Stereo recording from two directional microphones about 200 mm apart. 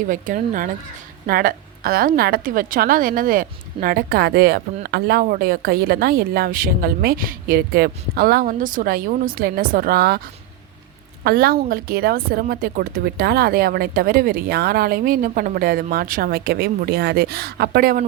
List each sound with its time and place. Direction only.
0.1 s a woman's voice: 40° right (ahead or behind)
11.2 s a woman's voice: 50° right (ahead or behind)